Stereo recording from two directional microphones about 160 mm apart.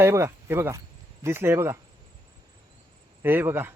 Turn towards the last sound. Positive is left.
turn(degrees=-15)  # may be behind; listen again after turning